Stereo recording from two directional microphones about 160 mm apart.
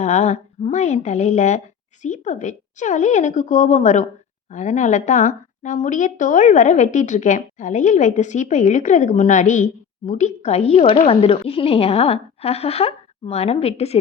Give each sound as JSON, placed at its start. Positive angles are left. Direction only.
{"t": 0.0, "sound": "a woman's voice", "side_deg": 45}